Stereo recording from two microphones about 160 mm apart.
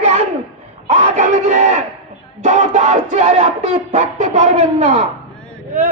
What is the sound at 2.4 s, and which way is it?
Music, 45° right (ahead or behind).